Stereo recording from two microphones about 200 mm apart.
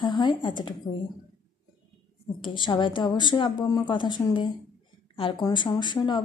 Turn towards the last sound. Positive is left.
turn(degrees=20)  # may be behind; listen again after turning